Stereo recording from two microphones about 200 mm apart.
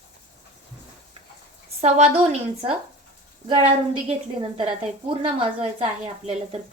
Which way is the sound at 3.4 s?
30° right (ahead or behind).